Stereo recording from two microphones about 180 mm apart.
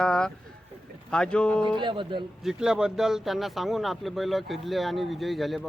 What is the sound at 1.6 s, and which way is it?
Speech, 25° right (ahead or behind).